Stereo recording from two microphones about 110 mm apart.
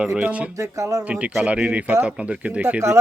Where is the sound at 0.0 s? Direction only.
10° right (ahead or behind).